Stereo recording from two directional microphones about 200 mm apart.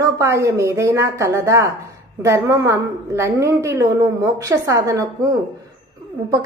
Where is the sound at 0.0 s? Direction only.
15° right (ahead or behind).